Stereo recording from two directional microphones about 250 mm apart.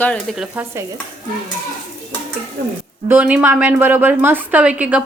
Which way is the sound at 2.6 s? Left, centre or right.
Right.